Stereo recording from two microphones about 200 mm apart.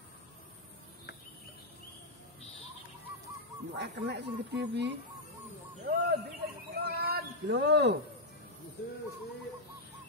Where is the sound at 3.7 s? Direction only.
55° right (ahead or behind).